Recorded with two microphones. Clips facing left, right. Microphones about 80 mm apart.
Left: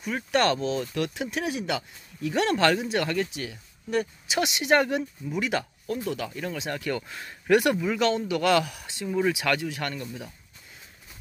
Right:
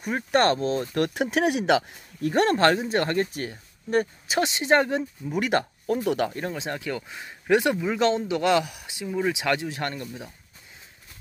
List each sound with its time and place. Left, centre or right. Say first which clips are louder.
0.1 s speech: right 2 dB; right
2.2 s speech: right 3 dB; right
5.3 s speech: right 4 dB; right
6.0 s speech: right 9 dB; right
6.4 s speech: right 1 dB; right
6.9 s speech: left 1 dB; centre; by 10.0 s right